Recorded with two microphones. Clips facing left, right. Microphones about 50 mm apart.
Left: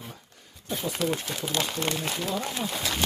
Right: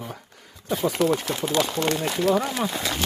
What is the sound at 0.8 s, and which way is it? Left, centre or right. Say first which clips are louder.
Speech: right 7 dB; right.